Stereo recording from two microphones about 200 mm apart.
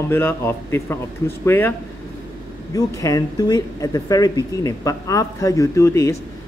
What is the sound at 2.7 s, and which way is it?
A man's voice, 15° left (ahead or behind).